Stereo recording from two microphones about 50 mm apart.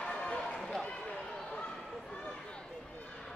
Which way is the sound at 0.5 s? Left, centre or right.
Centre.